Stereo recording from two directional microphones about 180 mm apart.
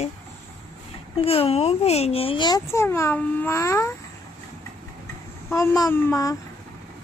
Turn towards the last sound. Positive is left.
turn(degrees=20)  # may be behind; listen again after turning